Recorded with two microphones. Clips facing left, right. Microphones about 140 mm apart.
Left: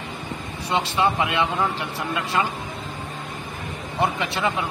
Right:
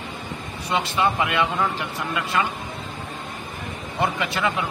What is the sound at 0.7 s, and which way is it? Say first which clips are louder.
Speech: left 1 dB; 25° left (ahead or behind).